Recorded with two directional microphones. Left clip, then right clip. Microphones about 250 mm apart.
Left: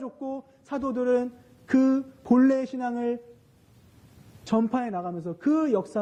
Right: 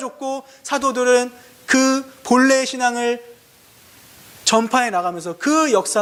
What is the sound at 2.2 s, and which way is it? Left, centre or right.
Speech, centre.